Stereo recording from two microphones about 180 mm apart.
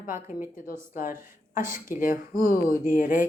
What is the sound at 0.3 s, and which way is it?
Speech, 45° left (ahead or behind).